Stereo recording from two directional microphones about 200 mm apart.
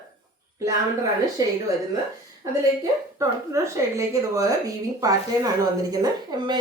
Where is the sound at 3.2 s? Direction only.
15° right (ahead or behind).